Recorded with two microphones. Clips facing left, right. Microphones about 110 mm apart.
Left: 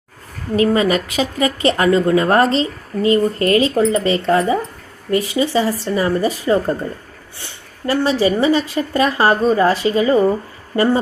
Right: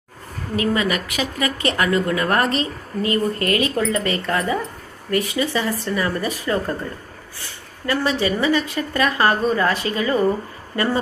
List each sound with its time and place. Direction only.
0.5 s a woman's voice: 30° left (ahead or behind)